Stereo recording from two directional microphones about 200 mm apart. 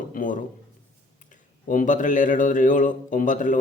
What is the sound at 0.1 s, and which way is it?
Speech, 40° left (ahead or behind).